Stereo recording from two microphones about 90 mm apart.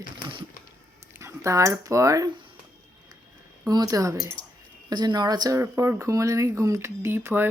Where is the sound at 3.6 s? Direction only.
45° right (ahead or behind).